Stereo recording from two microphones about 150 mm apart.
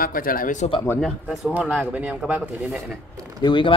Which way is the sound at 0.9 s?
Centre (ahead or behind).